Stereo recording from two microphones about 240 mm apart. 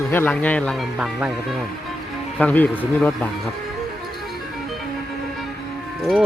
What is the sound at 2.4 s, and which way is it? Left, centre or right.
Speech, centre.